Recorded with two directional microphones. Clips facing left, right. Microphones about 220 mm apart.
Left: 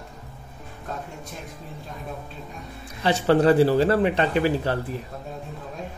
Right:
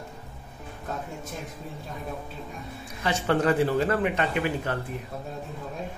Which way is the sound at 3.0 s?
35° left (ahead or behind).